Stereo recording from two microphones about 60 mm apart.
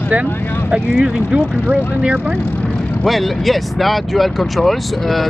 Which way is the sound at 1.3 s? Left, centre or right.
Centre.